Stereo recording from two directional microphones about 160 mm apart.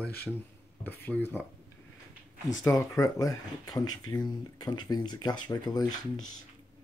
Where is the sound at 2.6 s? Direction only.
20° left (ahead or behind).